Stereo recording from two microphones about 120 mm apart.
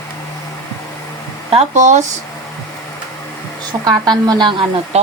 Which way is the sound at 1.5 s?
85° right.